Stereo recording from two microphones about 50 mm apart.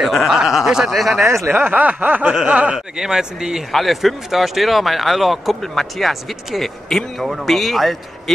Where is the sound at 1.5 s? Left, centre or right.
Right.